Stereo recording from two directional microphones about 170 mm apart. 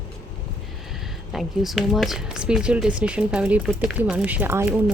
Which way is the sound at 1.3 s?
Centre (ahead or behind).